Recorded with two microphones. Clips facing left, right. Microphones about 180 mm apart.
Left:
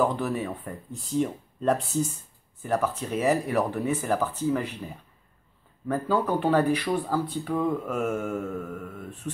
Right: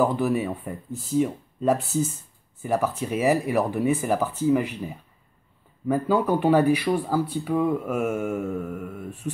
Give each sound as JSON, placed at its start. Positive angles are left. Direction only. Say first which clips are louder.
{"t": 0.0, "sound": "speech", "louder": "right 3 dB", "side_deg": -10}